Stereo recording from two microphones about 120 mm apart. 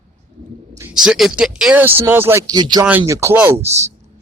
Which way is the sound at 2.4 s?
35° right (ahead or behind).